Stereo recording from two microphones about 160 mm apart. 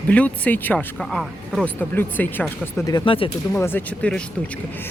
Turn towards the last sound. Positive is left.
turn(degrees=5)  # may be behind; listen again after turning